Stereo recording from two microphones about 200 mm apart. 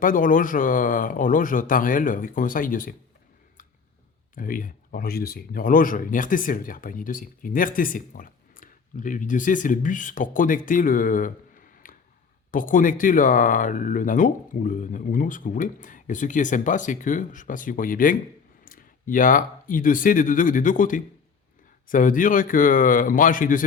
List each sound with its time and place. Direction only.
0.0 s speech: 45° left (ahead or behind)
4.4 s speech: 45° left (ahead or behind)